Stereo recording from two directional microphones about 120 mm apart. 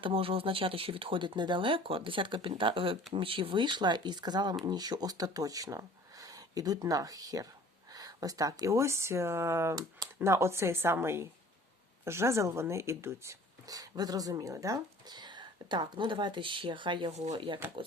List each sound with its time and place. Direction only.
0.0 s speech: 50° right (ahead or behind)
17.1 s speech: 70° right (ahead or behind)
17.3 s speech: 45° right (ahead or behind)